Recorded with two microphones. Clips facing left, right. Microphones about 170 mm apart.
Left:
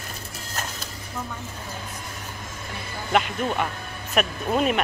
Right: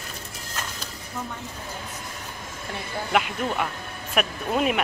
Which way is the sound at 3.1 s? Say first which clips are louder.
Left 2 dB; 5° right (ahead or behind).